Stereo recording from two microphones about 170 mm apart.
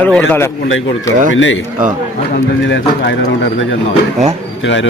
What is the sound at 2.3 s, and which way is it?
Speech, 90° left.